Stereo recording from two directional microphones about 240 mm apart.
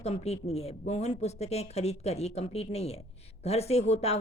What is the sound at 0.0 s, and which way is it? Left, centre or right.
A woman's voice, left.